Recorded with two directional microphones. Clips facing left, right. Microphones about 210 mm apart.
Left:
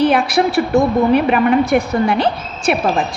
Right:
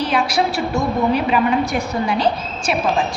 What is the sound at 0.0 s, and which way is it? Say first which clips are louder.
A woman's voice: left 5 dB; 55° left (ahead or behind).